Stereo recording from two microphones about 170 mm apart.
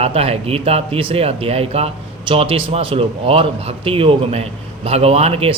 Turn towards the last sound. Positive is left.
turn(degrees=-35)  # may be behind; listen again after turning